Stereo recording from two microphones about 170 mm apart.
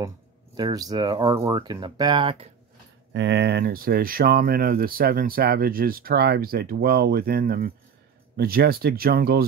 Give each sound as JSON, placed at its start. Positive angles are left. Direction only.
{"t": 0.6, "sound": "speech", "side_deg": -25}
{"t": 3.1, "sound": "speech", "side_deg": -90}